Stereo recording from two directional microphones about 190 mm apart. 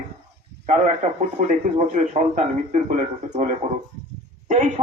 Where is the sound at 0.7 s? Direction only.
40° right (ahead or behind).